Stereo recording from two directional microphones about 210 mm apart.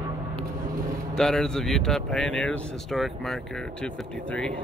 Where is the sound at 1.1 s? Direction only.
Centre (ahead or behind).